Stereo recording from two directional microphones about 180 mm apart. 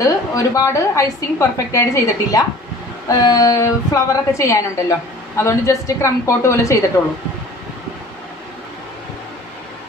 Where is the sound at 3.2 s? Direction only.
20° left (ahead or behind).